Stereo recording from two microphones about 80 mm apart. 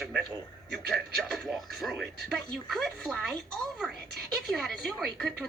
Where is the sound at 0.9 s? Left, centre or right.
Centre.